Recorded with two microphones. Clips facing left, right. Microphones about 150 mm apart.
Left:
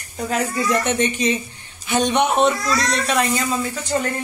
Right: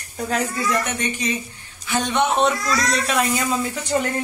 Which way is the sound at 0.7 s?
25° left (ahead or behind).